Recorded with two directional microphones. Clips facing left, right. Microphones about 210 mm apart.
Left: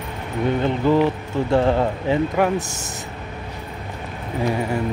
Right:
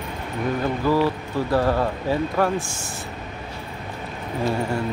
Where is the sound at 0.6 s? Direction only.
20° left (ahead or behind).